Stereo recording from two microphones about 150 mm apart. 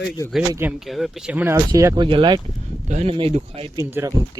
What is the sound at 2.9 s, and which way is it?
Speech, 50° right (ahead or behind).